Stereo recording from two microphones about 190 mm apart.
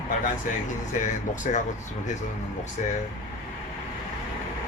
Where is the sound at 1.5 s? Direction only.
40° left (ahead or behind).